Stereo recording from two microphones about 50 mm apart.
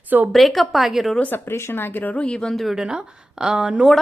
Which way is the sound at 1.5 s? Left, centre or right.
Left.